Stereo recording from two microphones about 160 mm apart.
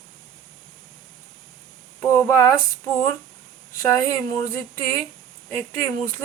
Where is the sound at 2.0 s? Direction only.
15° left (ahead or behind).